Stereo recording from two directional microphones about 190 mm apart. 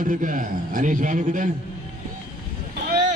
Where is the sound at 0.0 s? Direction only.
45° right (ahead or behind).